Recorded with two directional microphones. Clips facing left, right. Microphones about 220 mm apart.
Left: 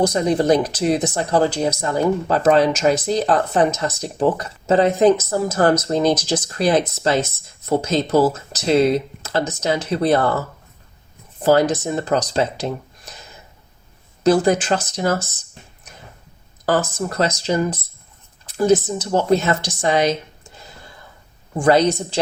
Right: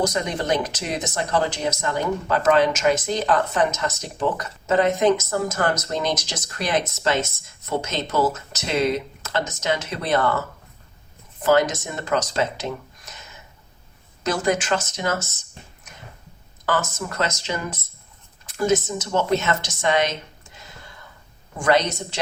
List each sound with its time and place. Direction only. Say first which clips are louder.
0.0 s speech: left 7 dB; 30° left (ahead or behind)
11.4 s speech: left 3 dB; 35° left (ahead or behind)
14.3 s speech: left 7 dB; 35° left (ahead or behind)
16.6 s speech: left 5 dB; 35° left (ahead or behind)
21.6 s speech: left 5 dB; 35° left (ahead or behind)